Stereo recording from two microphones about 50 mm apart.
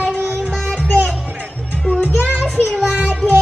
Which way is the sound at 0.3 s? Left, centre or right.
Centre.